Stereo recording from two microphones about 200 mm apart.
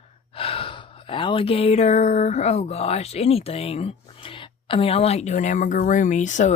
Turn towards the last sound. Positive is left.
turn(degrees=35)  # may be behind; listen again after turning